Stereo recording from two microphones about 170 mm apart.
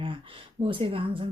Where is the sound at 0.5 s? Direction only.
30° right (ahead or behind).